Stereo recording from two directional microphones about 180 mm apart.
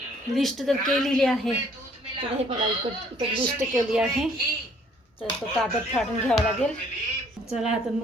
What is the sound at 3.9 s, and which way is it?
Speech, 5° right (ahead or behind).